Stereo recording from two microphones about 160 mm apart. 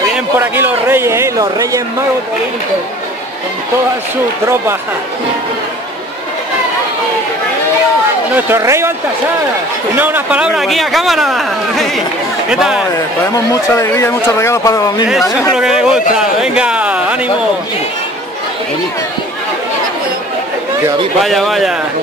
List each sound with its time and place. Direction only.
0.4 s a sound: 15° right (ahead or behind)
8.4 s speech: 15° right (ahead or behind)
9.9 s speech: 10° right (ahead or behind)
13.5 s a man's voice: 20° left (ahead or behind)
15.5 s speech: 5° right (ahead or behind)
21.2 s speech: centre (ahead or behind)